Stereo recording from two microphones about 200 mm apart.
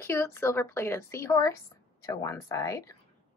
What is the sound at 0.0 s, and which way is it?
Speech, 10° left (ahead or behind).